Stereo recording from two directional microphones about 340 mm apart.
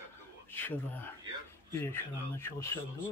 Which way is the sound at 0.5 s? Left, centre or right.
Centre.